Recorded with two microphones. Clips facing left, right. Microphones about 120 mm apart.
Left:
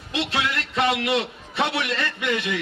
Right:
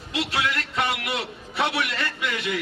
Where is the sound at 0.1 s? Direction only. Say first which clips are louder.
Left 1 dB; 25° left (ahead or behind).